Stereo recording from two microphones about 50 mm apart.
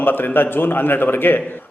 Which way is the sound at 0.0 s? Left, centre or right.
Left.